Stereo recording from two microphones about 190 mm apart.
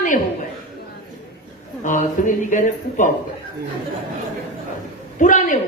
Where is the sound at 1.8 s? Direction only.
45° left (ahead or behind).